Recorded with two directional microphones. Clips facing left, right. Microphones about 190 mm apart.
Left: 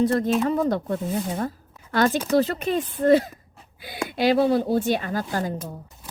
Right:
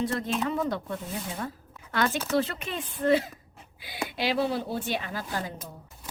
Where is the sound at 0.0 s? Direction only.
40° left (ahead or behind).